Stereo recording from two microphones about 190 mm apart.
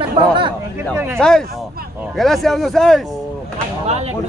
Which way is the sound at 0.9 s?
10° right (ahead or behind).